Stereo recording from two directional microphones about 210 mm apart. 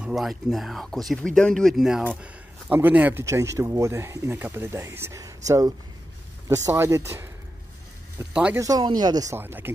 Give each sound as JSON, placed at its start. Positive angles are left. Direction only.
{"t": 0.0, "sound": "speech", "side_deg": 0}